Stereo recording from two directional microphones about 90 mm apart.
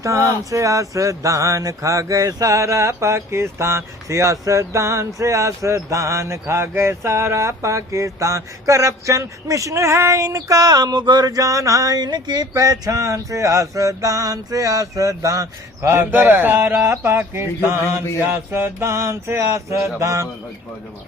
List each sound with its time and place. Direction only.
0.0 s speech: 35° right (ahead or behind)
15.9 s speech: 25° right (ahead or behind)